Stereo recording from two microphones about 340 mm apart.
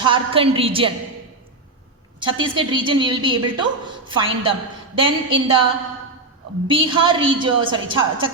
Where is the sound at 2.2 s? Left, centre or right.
Centre.